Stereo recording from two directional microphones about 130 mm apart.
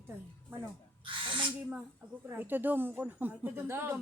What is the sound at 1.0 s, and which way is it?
Owl, 40° right (ahead or behind).